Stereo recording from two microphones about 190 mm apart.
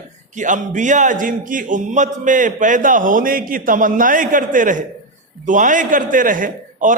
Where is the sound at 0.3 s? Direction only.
40° right (ahead or behind).